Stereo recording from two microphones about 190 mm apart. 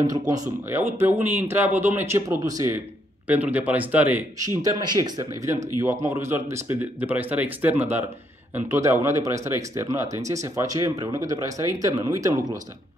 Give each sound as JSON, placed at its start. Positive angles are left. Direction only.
{"t": 0.3, "sound": "speech", "side_deg": -15}
{"t": 4.6, "sound": "speech", "side_deg": -20}